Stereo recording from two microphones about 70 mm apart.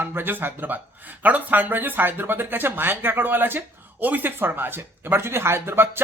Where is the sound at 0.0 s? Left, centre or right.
Right.